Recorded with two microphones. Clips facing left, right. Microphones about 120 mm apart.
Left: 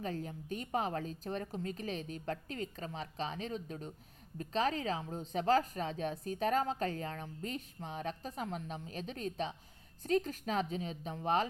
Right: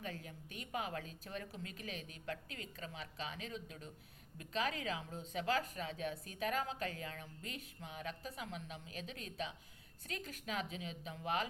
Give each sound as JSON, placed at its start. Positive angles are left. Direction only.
{"t": 0.0, "sound": "a woman's voice", "side_deg": 40}